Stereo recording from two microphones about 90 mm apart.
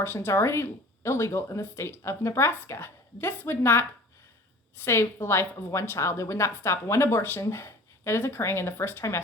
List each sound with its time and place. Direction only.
0.0 s a woman's voice: 25° left (ahead or behind)